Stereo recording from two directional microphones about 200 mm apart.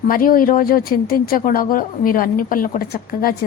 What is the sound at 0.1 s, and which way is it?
Speech, 45° left (ahead or behind).